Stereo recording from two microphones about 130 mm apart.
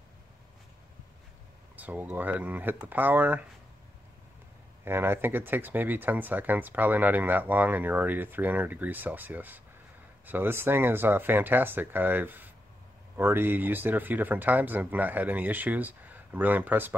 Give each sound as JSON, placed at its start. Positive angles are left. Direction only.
{"t": 1.8, "sound": "speech", "side_deg": -10}
{"t": 4.8, "sound": "speech", "side_deg": -15}